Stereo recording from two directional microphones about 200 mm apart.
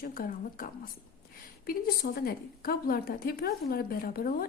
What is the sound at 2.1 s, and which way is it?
A woman's voice, 50° left (ahead or behind).